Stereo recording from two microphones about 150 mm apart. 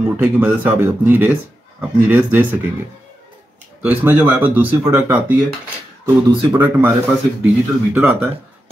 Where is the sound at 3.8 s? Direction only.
10° right (ahead or behind).